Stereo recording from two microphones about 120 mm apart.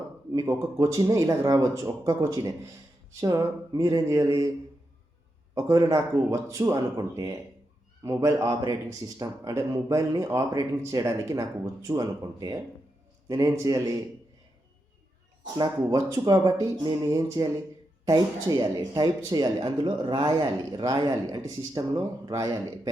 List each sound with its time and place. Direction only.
0.3 s speech: 30° right (ahead or behind)
5.5 s speech: 25° right (ahead or behind)
15.8 s speech: 30° right (ahead or behind)